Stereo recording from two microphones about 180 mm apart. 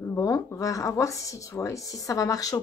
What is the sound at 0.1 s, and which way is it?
A woman's voice, 15° left (ahead or behind).